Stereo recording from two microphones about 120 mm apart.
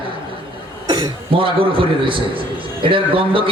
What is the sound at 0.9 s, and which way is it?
A man's voice, 40° right (ahead or behind).